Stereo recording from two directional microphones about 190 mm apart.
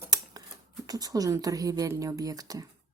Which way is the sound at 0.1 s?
20° right (ahead or behind).